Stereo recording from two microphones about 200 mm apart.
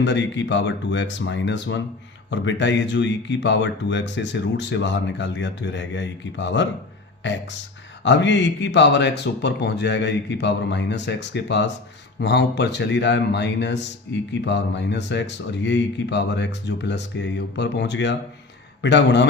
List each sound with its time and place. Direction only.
0.0 s a man's voice: 65° left (ahead or behind)